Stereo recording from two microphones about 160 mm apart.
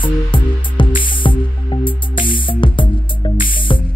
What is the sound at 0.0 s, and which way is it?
Music, 30° left (ahead or behind).